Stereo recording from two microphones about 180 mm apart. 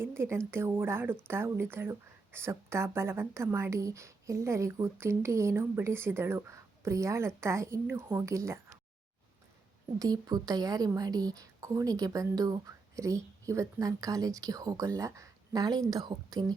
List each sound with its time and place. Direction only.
0.0 s speech: 15° right (ahead or behind)
10.0 s a woman's voice: 20° right (ahead or behind)